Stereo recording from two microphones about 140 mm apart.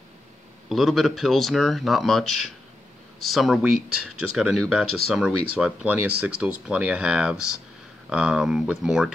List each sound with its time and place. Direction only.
0.7 s speech: centre (ahead or behind)